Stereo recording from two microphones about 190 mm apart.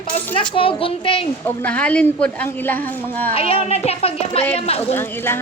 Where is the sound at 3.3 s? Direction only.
30° left (ahead or behind).